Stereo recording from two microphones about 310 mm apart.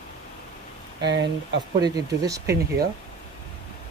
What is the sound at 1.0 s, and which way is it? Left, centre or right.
Speech, right.